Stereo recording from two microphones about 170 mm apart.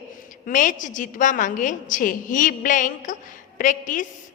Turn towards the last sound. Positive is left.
turn(degrees=50)  # may be behind; listen again after turning